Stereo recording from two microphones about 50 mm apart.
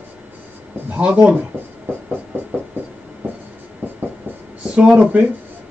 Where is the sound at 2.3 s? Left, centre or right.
Right.